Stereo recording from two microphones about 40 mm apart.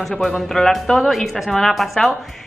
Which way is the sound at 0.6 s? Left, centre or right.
Centre.